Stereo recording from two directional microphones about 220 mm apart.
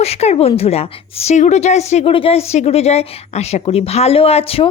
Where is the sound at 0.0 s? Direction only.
30° left (ahead or behind).